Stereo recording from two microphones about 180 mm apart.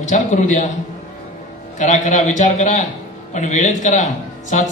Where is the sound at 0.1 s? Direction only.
45° left (ahead or behind).